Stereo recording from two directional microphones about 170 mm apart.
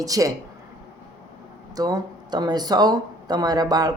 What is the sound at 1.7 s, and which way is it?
Speech, 20° right (ahead or behind).